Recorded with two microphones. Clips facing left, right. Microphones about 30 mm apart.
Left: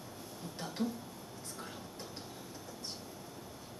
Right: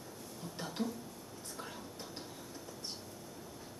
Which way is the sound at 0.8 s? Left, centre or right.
Left.